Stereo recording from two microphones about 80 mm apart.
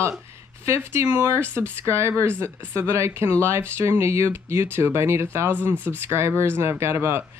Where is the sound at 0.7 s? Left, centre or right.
Right.